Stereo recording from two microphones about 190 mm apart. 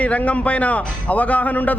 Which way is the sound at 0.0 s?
5° left (ahead or behind).